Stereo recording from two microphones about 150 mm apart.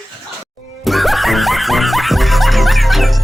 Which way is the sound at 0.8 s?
Centre (ahead or behind).